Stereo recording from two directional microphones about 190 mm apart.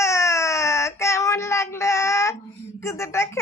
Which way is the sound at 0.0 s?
15° left (ahead or behind).